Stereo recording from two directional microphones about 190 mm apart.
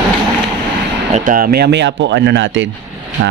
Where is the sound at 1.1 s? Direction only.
45° right (ahead or behind).